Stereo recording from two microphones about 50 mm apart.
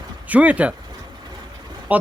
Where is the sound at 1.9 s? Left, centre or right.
Right.